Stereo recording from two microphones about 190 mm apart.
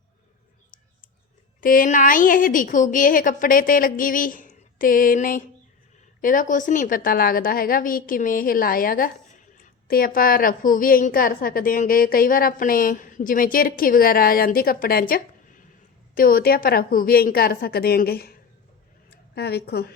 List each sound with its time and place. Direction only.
1.6 s a woman's voice: 45° left (ahead or behind)